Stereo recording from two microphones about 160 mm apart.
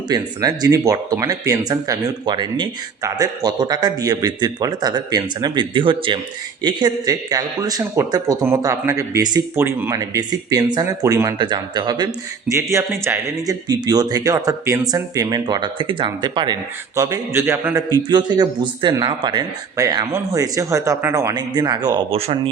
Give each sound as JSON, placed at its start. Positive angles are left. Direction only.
{"t": 0.1, "sound": "speech", "side_deg": -25}
{"t": 12.7, "sound": "speech", "side_deg": -15}